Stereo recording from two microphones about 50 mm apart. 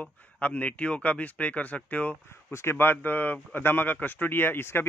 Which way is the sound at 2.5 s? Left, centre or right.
Left.